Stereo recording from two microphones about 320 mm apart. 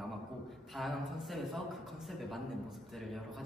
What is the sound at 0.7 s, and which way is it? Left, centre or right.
A man's voice, centre.